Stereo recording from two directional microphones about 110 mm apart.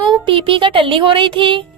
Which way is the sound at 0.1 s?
55° right (ahead or behind).